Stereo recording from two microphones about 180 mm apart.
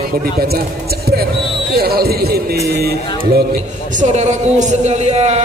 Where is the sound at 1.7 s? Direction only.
60° right (ahead or behind).